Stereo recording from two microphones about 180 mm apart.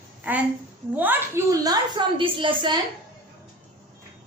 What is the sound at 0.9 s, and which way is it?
A woman's voice, 10° right (ahead or behind).